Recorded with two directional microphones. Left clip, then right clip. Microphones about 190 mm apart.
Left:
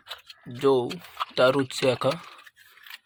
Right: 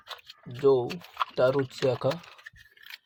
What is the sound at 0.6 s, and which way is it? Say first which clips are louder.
Speech: left 1 dB; 5° right (ahead or behind).